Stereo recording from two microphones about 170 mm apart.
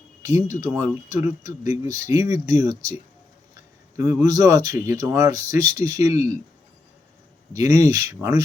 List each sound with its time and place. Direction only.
0.2 s speech: 20° right (ahead or behind)
3.9 s speech: 15° right (ahead or behind)
7.5 s speech: 20° right (ahead or behind)